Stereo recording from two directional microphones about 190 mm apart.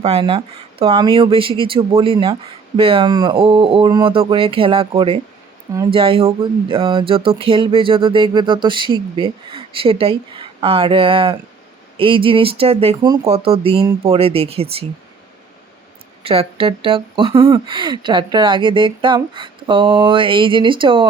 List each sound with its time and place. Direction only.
0.0 s speech: 30° right (ahead or behind)
16.2 s speech: 30° right (ahead or behind)